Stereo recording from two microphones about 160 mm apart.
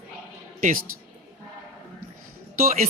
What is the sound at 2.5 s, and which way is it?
Speech, 60° right (ahead or behind).